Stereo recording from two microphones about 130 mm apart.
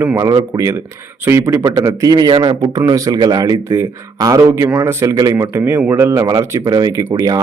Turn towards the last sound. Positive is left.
turn(degrees=-30)  # may be behind; listen again after turning